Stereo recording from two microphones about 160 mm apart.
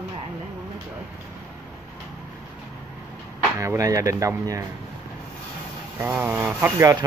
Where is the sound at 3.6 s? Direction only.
20° right (ahead or behind).